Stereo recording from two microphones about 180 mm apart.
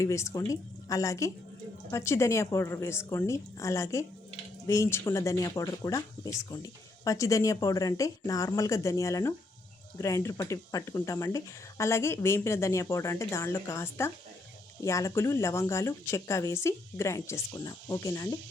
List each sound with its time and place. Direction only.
0.0 s speech: 15° left (ahead or behind)